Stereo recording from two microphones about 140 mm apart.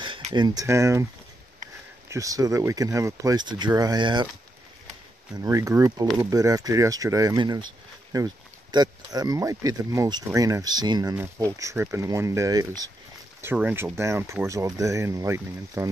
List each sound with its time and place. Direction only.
0.3 s speech: 25° right (ahead or behind)
2.0 s speech: 25° right (ahead or behind)
5.3 s speech: 25° right (ahead or behind)
13.4 s speech: 15° right (ahead or behind)